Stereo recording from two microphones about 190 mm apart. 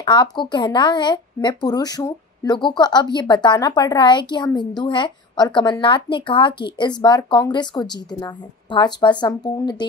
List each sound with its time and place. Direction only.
0.0 s a woman's voice: 25° left (ahead or behind)